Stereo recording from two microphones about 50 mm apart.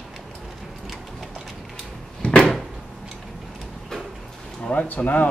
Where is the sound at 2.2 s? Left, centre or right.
Left.